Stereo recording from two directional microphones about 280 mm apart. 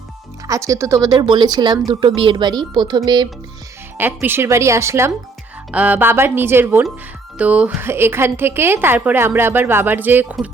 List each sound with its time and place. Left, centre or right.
0.4 s a woman's voice: centre